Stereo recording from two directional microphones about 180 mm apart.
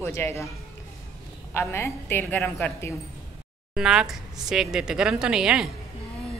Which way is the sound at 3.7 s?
5° right (ahead or behind).